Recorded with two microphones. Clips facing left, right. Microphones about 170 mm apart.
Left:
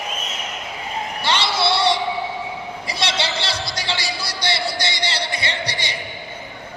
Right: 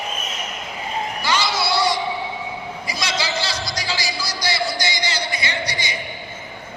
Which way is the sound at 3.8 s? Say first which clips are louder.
Left 1 dB; 60° left (ahead or behind).